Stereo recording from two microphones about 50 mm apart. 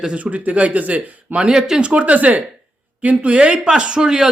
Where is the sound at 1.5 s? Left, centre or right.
Centre.